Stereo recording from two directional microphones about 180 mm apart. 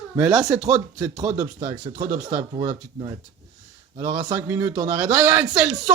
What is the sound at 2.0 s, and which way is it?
Speech, 50° right (ahead or behind).